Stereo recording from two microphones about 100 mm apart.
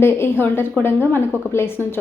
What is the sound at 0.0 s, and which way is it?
Speech, 25° left (ahead or behind).